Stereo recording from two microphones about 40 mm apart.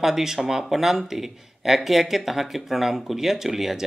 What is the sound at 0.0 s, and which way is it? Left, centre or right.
Speech, centre.